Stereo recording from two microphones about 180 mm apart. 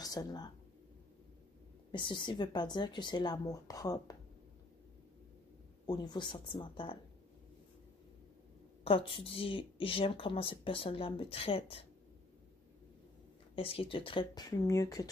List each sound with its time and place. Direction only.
0.0 s speech: 20° left (ahead or behind)
1.9 s speech: 25° left (ahead or behind)
5.9 s speech: 25° left (ahead or behind)
8.8 s a woman's voice: 30° left (ahead or behind)
13.6 s speech: 30° left (ahead or behind)